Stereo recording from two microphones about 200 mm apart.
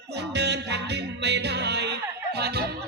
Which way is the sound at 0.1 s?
55° right (ahead or behind).